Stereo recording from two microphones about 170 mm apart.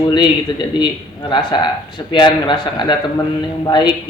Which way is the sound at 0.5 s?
25° left (ahead or behind).